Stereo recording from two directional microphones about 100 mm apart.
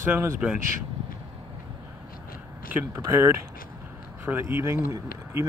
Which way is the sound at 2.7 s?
20° right (ahead or behind).